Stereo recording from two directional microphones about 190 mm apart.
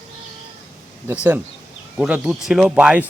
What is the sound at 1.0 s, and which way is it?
A man's voice, 10° right (ahead or behind).